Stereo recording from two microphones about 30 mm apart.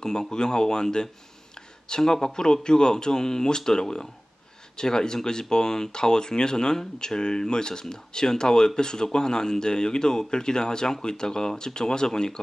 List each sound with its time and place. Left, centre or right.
0.0 s speech: left